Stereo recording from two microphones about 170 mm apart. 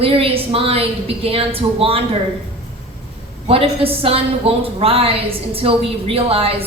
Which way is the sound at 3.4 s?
35° right (ahead or behind).